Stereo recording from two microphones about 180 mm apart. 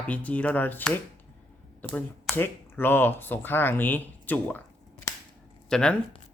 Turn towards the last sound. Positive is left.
turn(degrees=5)  # may be behind; listen again after turning